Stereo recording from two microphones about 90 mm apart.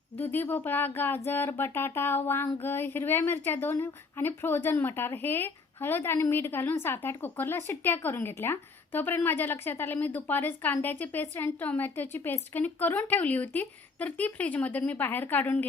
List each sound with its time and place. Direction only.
0.2 s a woman's voice: 20° left (ahead or behind)